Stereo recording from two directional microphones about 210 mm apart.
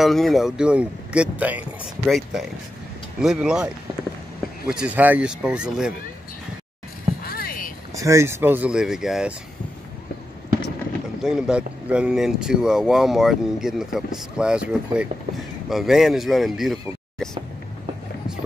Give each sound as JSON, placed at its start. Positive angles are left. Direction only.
{"t": 0.0, "sound": "speech", "side_deg": 0}
{"t": 7.2, "sound": "boat", "side_deg": 45}
{"t": 7.9, "sound": "speech", "side_deg": -15}
{"t": 11.2, "sound": "speech", "side_deg": -5}